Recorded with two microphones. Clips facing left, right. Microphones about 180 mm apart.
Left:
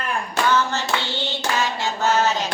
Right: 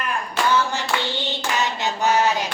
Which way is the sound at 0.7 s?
15° right (ahead or behind).